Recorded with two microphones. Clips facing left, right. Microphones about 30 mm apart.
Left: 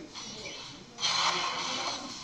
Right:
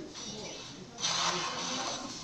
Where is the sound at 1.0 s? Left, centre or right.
Left.